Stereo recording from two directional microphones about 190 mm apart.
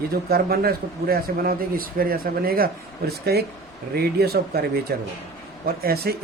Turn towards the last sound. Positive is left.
turn(degrees=-55)  # may be behind; listen again after turning